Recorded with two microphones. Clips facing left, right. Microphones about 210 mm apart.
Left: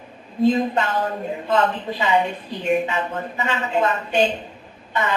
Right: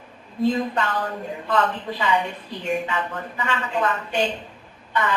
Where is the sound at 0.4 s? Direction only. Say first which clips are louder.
Left 3 dB; 25° left (ahead or behind).